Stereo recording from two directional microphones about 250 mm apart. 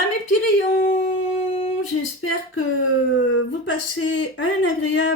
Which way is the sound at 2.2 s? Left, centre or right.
Left.